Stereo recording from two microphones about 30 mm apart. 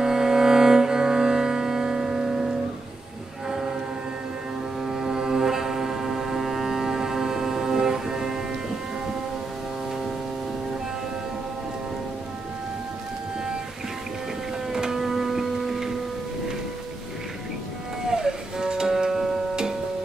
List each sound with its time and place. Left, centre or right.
0.0 s cello: centre
3.4 s train: centre
4.8 s foghorn: centre
14.7 s music: centre
18.0 s music: right